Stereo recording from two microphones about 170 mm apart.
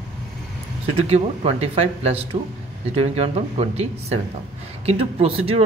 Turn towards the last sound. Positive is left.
turn(degrees=-35)  # may be behind; listen again after turning